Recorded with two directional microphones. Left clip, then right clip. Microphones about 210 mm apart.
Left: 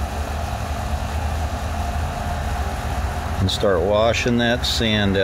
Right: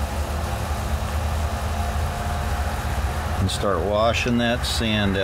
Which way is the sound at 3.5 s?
25° left (ahead or behind).